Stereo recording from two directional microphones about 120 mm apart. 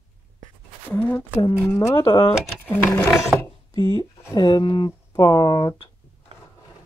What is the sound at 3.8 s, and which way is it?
Speech, 30° left (ahead or behind).